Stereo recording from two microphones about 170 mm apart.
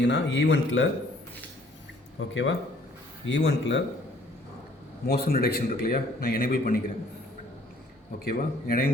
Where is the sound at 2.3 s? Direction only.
90° left.